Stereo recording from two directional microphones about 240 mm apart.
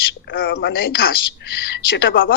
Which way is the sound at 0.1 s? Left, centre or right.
Left.